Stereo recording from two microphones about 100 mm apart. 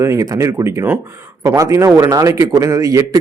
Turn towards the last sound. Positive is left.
turn(degrees=-35)  # may be behind; listen again after turning